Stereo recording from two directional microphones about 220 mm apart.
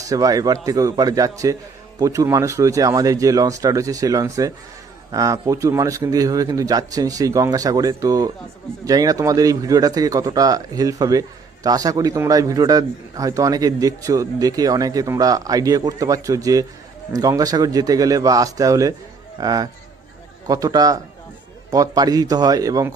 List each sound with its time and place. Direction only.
0.0 s speech: 15° right (ahead or behind)